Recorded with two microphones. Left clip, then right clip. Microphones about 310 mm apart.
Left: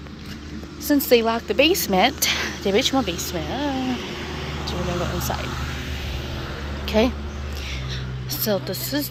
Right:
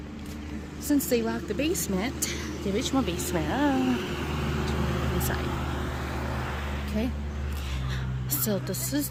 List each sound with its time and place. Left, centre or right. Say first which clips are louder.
1.1 s a woman's voice: left 10 dB; centre
3.8 s a sound: left 1 dB; right
5.5 s hum: left 2 dB; right
6.9 s speech: left 14 dB; left
8.4 s a woman's voice: left 8 dB; centre